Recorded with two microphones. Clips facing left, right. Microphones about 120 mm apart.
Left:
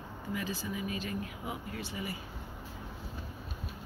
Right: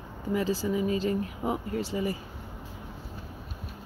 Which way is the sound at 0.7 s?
30° right (ahead or behind).